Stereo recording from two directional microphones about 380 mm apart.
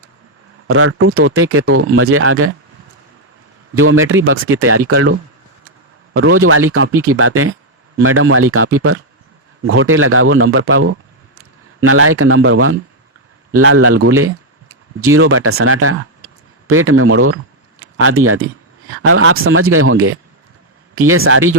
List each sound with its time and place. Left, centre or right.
0.7 s speech: right
3.8 s speech: right
6.1 s speech: right